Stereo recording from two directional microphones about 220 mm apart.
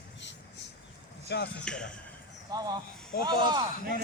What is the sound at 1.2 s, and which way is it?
Speech, 50° left (ahead or behind).